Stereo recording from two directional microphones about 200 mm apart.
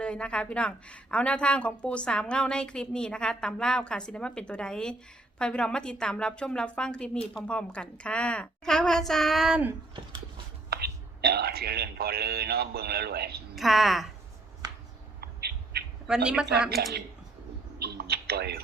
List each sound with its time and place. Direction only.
0.0 s a woman's voice: 5° left (ahead or behind)
10.7 s speech: 50° right (ahead or behind)
13.6 s a woman's voice: centre (ahead or behind)
15.2 s bird: 50° right (ahead or behind)
16.0 s a woman's voice: 5° right (ahead or behind)
16.5 s a woman's voice: 55° right (ahead or behind)
17.7 s computer keyboard: 50° right (ahead or behind)